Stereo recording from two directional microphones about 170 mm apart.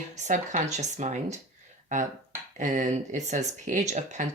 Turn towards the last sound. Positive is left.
turn(degrees=-45)  # may be behind; listen again after turning